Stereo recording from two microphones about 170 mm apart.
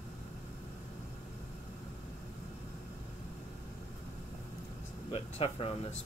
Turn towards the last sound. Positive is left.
turn(degrees=35)  # may be behind; listen again after turning